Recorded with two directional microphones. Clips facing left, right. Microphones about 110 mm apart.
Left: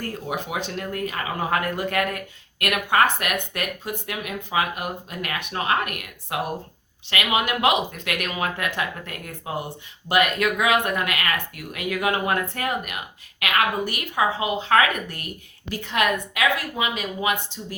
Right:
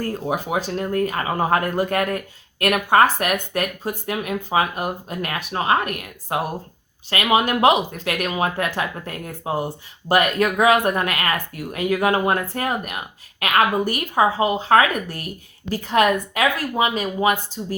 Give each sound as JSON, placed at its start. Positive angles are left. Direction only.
{"t": 0.1, "sound": "speech", "side_deg": -35}